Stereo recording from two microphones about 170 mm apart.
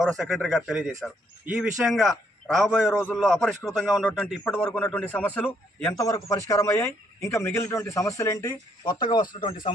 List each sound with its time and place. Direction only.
0.0 s a man's voice: centre (ahead or behind); by 9.6 s 25° left (ahead or behind)